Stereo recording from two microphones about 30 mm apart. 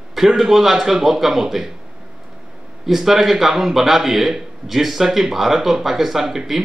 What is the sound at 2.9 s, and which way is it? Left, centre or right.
Speech, centre.